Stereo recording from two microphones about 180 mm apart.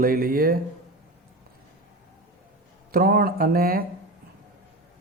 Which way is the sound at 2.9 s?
55° right (ahead or behind).